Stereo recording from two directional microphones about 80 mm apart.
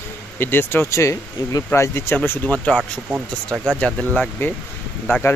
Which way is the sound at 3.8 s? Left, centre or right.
Centre.